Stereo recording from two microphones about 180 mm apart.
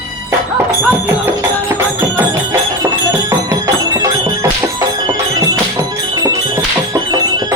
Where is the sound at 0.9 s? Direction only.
10° right (ahead or behind).